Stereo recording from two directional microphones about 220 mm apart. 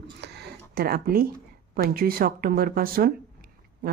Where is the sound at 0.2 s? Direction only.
50° right (ahead or behind).